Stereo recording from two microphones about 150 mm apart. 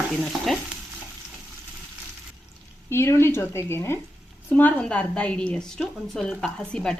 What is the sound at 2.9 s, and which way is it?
A woman's voice, 15° left (ahead or behind).